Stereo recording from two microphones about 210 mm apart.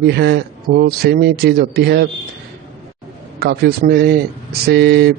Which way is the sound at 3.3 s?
50° right (ahead or behind).